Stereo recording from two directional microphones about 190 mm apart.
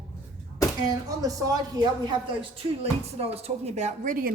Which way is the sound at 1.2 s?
20° right (ahead or behind).